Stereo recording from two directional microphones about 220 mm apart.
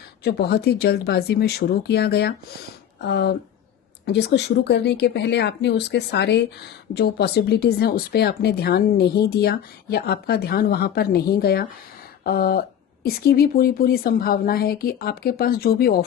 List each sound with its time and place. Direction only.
0.3 s speech: 45° left (ahead or behind)